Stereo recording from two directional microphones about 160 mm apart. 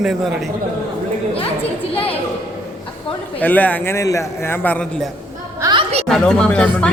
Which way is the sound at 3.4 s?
10° left (ahead or behind).